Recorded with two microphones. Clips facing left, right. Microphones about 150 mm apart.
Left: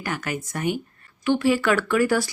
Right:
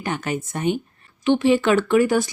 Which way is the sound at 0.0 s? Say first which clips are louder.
Right 3 dB; 25° right (ahead or behind).